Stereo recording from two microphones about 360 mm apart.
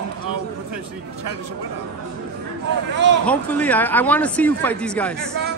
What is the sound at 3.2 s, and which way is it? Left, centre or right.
Speech, centre.